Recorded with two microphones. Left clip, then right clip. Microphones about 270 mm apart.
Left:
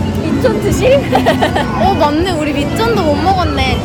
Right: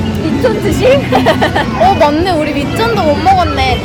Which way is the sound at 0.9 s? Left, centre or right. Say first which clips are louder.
Right 1 dB; right.